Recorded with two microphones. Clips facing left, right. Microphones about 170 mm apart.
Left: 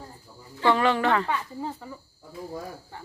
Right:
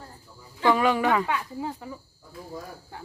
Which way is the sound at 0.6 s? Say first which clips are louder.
Even; 10° right (ahead or behind).